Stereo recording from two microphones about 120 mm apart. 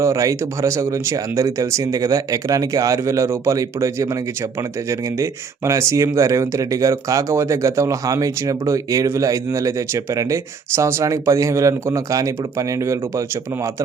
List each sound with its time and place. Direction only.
0.0 s speech: 25° right (ahead or behind)